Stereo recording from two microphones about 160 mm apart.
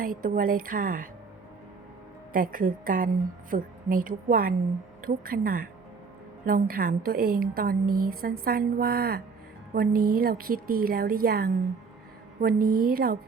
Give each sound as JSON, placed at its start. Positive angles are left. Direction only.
{"t": 0.0, "sound": "a woman's voice", "side_deg": -60}
{"t": 2.3, "sound": "a woman's voice", "side_deg": -60}